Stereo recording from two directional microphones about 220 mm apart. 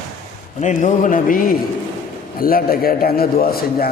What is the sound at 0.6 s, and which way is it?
A man's voice, 35° left (ahead or behind).